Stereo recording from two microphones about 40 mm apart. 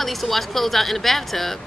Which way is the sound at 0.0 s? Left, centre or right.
Centre.